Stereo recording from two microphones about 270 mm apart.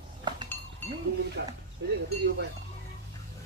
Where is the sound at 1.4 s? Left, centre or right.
Right.